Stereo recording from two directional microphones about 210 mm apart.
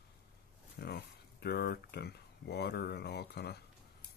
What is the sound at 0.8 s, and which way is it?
Speech, 50° left (ahead or behind).